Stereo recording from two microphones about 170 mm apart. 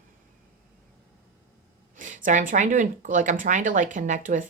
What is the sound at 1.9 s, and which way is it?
Speech, 50° right (ahead or behind).